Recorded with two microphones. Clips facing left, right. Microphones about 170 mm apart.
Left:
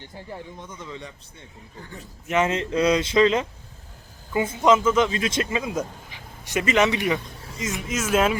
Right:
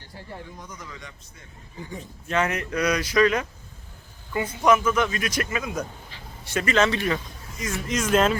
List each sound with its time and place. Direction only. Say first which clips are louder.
0.6 s a man's voice: left 4 dB; 25° left (ahead or behind)
1.8 s a man's voice: right 5 dB; 15° right (ahead or behind)
2.2 s a man's voice: left 3 dB; 20° left (ahead or behind)
7.9 s speech: right 1 dB; 5° left (ahead or behind)